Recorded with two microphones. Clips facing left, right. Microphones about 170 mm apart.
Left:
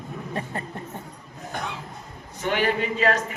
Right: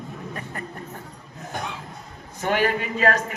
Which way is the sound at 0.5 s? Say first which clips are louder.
Left 2 dB; 25° left (ahead or behind).